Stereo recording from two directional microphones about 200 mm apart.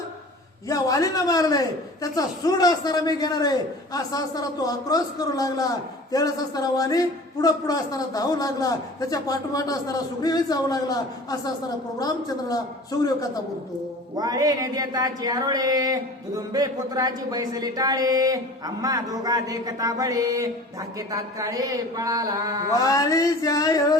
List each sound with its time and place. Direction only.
0.7 s a man's voice: 15° left (ahead or behind)
14.2 s speech: 20° right (ahead or behind)
22.8 s a man's voice: 15° left (ahead or behind)